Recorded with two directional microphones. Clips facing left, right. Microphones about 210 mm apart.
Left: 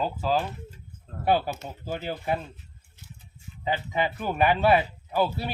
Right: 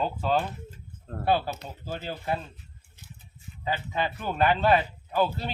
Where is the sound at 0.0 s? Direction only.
Centre (ahead or behind).